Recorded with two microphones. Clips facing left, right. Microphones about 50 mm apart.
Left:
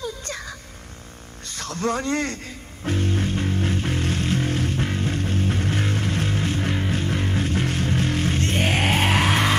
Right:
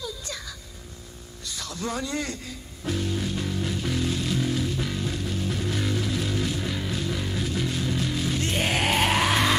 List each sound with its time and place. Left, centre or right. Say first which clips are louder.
0.0 s a sound: left 4 dB; left
1.4 s a man's voice: left 6 dB; left
2.8 s music: left 4 dB; left